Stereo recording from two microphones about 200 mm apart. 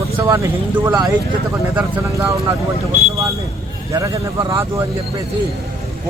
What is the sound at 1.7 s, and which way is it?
Speech, 10° right (ahead or behind).